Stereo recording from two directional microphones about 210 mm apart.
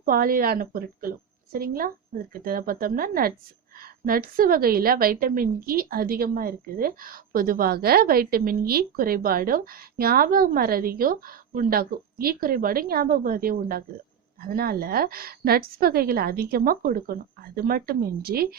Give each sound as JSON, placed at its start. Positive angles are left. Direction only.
{"t": 0.0, "sound": "a woman's voice", "side_deg": -40}